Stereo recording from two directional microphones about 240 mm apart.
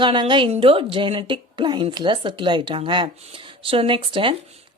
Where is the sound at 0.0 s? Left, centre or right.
Centre.